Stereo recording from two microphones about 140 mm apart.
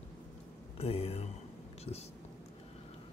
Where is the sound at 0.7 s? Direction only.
45° left (ahead or behind).